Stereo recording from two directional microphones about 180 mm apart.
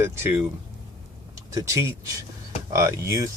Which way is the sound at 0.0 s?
10° right (ahead or behind).